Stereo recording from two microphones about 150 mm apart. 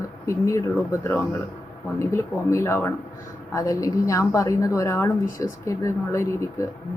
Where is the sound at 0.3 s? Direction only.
20° left (ahead or behind).